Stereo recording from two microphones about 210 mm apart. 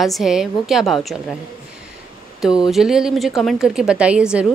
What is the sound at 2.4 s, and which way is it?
A woman's voice, centre (ahead or behind).